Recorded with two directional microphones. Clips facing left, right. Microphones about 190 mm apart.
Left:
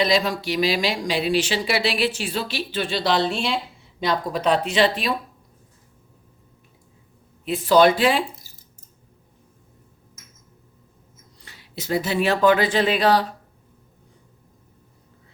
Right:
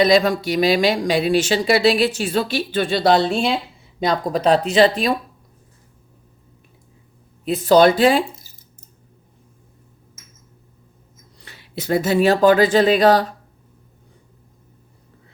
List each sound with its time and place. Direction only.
0.0 s speech: 50° right (ahead or behind)
7.4 s speech: 40° right (ahead or behind)
11.4 s speech: 60° right (ahead or behind); by 13.2 s 45° right (ahead or behind)